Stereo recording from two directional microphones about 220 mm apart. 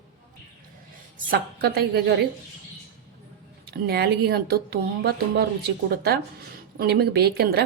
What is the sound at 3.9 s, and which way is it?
Speech, 45° right (ahead or behind).